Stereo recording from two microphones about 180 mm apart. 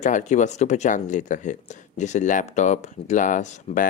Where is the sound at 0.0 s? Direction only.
45° left (ahead or behind).